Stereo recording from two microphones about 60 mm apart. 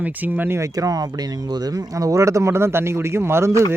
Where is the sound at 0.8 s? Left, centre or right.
Right.